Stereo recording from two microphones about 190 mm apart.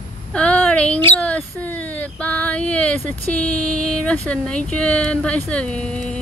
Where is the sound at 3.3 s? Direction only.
5° left (ahead or behind).